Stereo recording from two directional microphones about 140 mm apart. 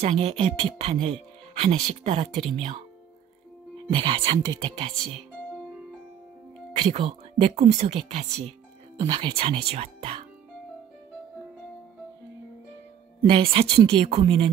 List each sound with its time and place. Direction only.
0.0 s speech: 45° right (ahead or behind)
3.9 s speech: 35° right (ahead or behind)
6.8 s speech: 40° right (ahead or behind)
8.9 s speech: 35° right (ahead or behind)
13.2 s speech: 40° right (ahead or behind)